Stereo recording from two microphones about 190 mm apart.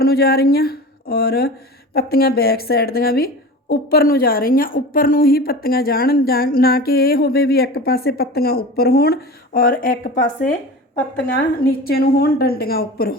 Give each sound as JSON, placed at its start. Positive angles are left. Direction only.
{"t": 0.0, "sound": "a woman's voice", "side_deg": 55}
{"t": 11.6, "sound": "a woman's voice", "side_deg": 55}